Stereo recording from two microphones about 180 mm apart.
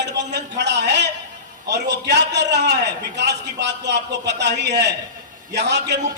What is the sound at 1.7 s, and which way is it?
A man's voice, 75° right (ahead or behind).